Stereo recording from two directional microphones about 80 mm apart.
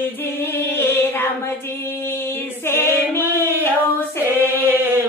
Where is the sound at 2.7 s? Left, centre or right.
Left.